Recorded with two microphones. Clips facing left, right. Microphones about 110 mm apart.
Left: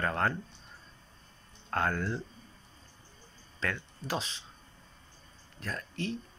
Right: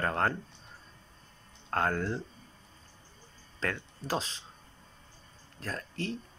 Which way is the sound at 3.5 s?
35° right (ahead or behind).